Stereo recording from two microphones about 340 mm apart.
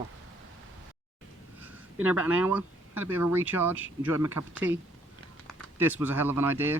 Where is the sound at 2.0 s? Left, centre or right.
Centre.